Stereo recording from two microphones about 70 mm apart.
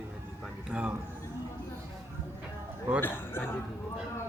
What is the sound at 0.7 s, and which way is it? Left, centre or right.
Speech, centre.